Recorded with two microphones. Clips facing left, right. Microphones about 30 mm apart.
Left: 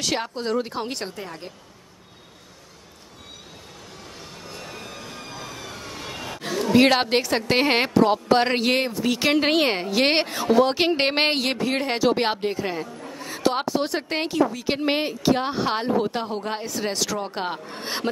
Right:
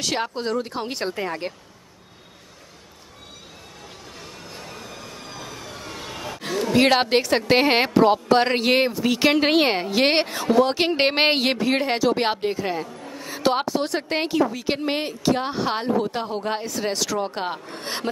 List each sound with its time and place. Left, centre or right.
0.0 s a woman's voice: centre
1.0 s speech: right
4.9 s vehicle: centre
5.8 s vehicle: centre
6.4 s a woman's voice: centre
11.0 s a woman's voice: centre
13.0 s a sound: centre
13.4 s a woman's voice: centre
13.7 s a woman's voice: centre